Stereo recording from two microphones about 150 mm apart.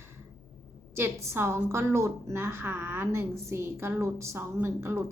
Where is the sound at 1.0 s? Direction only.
15° right (ahead or behind).